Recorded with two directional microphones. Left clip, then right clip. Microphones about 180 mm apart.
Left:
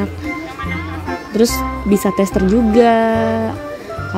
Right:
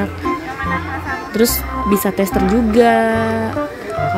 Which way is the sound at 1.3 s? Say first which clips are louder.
Left 2 dB; 20° left (ahead or behind).